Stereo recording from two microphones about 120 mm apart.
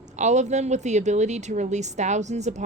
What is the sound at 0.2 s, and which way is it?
A woman's voice, 75° right (ahead or behind).